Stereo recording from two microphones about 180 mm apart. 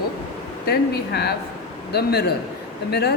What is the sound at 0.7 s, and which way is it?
Speech, 65° left (ahead or behind).